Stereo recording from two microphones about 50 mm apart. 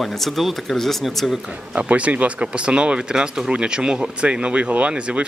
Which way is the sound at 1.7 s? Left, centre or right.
Right.